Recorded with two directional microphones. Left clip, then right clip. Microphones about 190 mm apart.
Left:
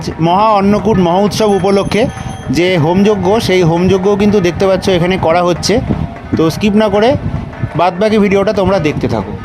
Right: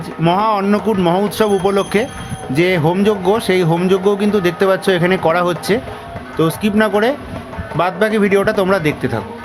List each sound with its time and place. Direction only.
0.3 s speech: 25° left (ahead or behind)
0.6 s speech: 15° left (ahead or behind)